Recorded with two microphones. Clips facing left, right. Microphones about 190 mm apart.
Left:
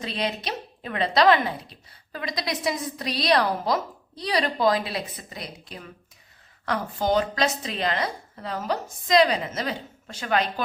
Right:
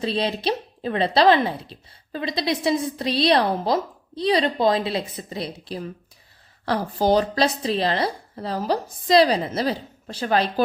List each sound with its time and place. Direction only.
0.0 s a woman's voice: 30° right (ahead or behind)